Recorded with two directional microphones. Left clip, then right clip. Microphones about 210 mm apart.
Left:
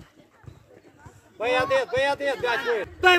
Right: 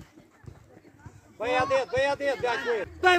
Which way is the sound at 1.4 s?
25° left (ahead or behind).